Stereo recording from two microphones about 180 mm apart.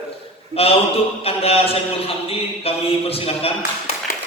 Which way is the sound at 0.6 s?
35° left (ahead or behind).